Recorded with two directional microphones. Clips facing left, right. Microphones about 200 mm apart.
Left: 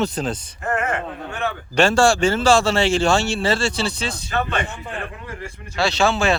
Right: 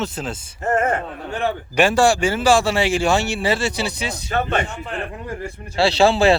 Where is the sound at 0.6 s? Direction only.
35° right (ahead or behind).